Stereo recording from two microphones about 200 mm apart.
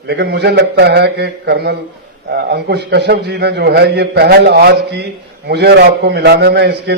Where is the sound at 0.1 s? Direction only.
55° right (ahead or behind).